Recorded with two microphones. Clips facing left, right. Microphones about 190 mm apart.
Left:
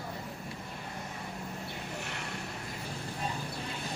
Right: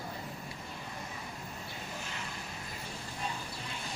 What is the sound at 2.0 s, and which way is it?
Vehicle, 70° left (ahead or behind).